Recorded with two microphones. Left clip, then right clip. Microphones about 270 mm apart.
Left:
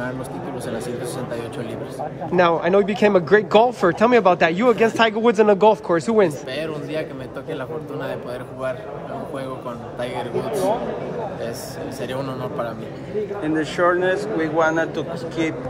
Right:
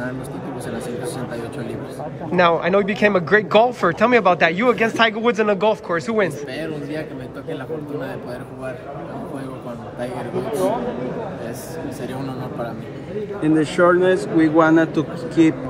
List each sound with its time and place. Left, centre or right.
2.3 s speech: centre
13.4 s a man's voice: right